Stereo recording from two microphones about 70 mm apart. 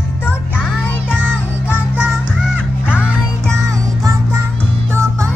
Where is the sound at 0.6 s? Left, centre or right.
Left.